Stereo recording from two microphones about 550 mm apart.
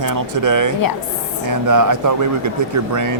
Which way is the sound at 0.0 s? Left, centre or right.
Right.